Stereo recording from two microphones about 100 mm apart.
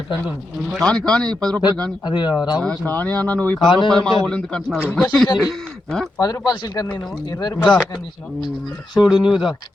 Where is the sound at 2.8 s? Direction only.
15° left (ahead or behind).